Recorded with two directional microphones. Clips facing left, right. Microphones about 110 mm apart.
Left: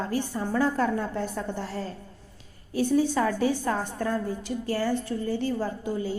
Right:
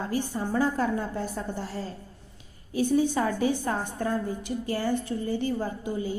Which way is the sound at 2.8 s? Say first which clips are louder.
Left 1 dB; 15° right (ahead or behind).